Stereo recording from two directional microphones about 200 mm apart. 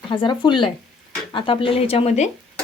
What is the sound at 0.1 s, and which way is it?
Speech, 25° left (ahead or behind).